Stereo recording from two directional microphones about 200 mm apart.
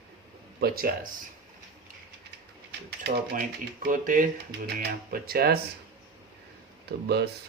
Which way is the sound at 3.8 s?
45° right (ahead or behind).